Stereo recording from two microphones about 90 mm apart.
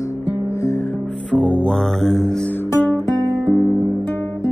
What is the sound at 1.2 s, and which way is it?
Music, 10° left (ahead or behind).